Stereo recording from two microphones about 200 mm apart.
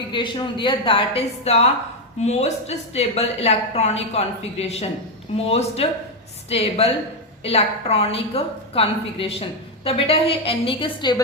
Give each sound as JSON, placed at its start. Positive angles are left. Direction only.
{"t": 0.1, "sound": "a woman's voice", "side_deg": 25}